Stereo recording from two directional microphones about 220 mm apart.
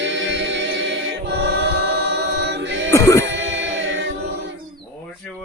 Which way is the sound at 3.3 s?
55° right (ahead or behind).